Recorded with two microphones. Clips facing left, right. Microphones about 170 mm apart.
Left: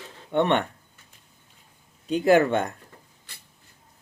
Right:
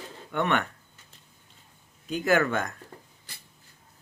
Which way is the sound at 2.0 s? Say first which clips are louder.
Left 5 dB; 30° left (ahead or behind).